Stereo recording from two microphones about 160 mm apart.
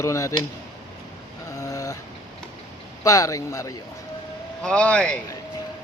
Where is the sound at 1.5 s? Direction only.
20° left (ahead or behind).